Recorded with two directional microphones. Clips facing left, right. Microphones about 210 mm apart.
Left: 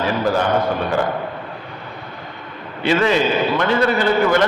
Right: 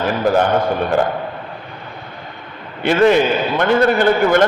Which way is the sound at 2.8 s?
55° right (ahead or behind).